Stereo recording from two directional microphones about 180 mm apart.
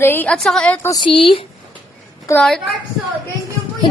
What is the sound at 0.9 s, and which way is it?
Speech, 30° left (ahead or behind).